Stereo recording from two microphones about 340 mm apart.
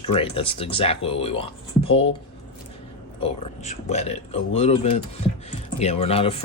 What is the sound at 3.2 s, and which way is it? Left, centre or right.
Speech, centre.